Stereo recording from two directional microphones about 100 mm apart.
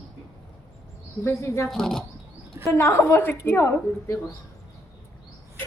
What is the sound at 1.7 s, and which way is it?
Speech, 5° left (ahead or behind).